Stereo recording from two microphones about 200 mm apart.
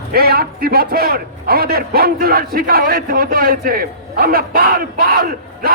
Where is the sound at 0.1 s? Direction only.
50° right (ahead or behind).